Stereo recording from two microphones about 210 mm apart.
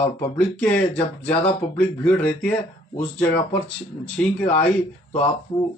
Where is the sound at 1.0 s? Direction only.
30° left (ahead or behind).